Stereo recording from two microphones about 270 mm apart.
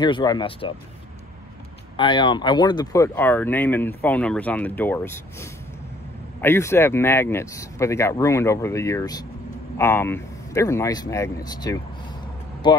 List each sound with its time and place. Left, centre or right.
0.0 s speech: centre
2.0 s speech: centre